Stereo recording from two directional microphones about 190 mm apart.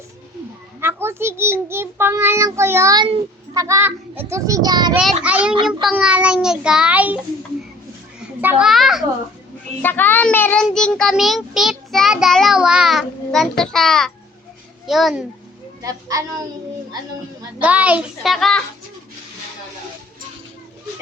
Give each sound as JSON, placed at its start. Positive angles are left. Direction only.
{"t": 0.8, "sound": "a child's voice", "side_deg": -10}
{"t": 4.9, "sound": "a child's voice", "side_deg": -5}
{"t": 8.2, "sound": "a child's voice", "side_deg": -5}
{"t": 9.8, "sound": "a child's voice", "side_deg": 10}
{"t": 15.8, "sound": "a child's voice", "side_deg": -20}
{"t": 17.6, "sound": "a child's voice", "side_deg": -10}